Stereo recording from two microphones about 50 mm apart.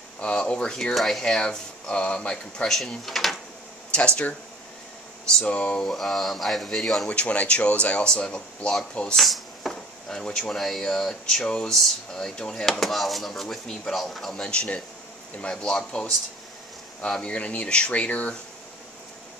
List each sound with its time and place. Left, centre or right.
0.2 s speech: left
0.9 s speech: centre
3.1 s speech: centre
3.9 s speech: left
5.4 s speech: left
5.8 s speech: centre
7.1 s speech: left
9.1 s speech: centre
14.4 s speech: left
17.2 s speech: left